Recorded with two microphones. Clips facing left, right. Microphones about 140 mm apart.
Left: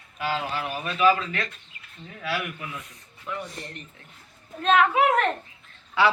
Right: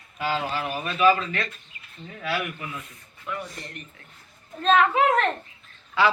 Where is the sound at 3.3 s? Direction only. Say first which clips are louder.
Left 1 dB; centre (ahead or behind).